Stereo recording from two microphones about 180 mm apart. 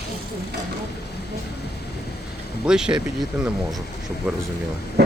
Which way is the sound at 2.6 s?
5° right (ahead or behind).